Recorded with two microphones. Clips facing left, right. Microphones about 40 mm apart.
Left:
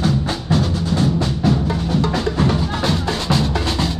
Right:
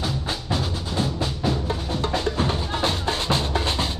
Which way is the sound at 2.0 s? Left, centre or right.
Left.